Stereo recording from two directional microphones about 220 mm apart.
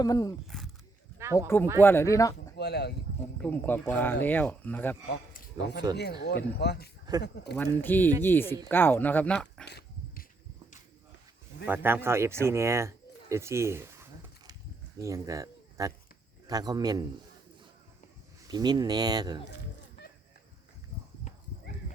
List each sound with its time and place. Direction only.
0.0 s speech: 15° left (ahead or behind)
0.4 s wild animals: centre (ahead or behind)
1.2 s speech: 10° right (ahead or behind)
1.8 s speech: 10° left (ahead or behind)
2.6 s speech: 50° left (ahead or behind)
3.4 s speech: 5° left (ahead or behind)
5.0 s a man's voice: 45° left (ahead or behind)
7.8 s speech: 10° left (ahead or behind)
9.6 s dog: 50° left (ahead or behind)
11.6 s a man's voice: 10° right (ahead or behind)
18.4 s speech: 20° right (ahead or behind)